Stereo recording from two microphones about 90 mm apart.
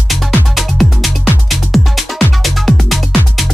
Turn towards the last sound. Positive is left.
turn(degrees=0)  # may be behind; listen again after turning